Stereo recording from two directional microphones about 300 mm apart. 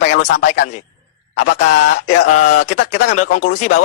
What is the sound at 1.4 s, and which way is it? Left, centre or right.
Speech, left.